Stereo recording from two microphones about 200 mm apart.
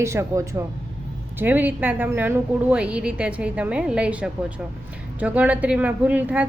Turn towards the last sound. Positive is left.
turn(degrees=-5)  # may be behind; listen again after turning